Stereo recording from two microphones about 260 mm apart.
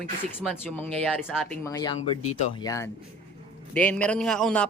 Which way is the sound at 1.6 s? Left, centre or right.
Centre.